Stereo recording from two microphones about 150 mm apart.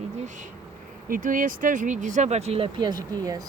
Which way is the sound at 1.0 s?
65° right (ahead or behind).